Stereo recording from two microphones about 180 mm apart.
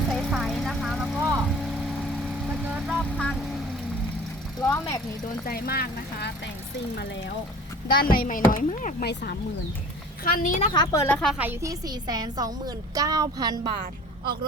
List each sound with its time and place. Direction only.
0.1 s vehicle: centre (ahead or behind)
1.2 s vehicle: 15° right (ahead or behind)
2.6 s vehicle: centre (ahead or behind)
4.6 s speech: 20° left (ahead or behind)
5.5 s speech: 55° left (ahead or behind)
8.1 s speech: 50° left (ahead or behind)
10.8 s a woman's voice: 15° left (ahead or behind)
11.2 s a woman's voice: centre (ahead or behind)
11.4 s a woman's voice: 20° right (ahead or behind)